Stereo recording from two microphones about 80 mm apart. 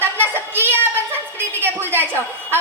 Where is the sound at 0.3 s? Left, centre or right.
Right.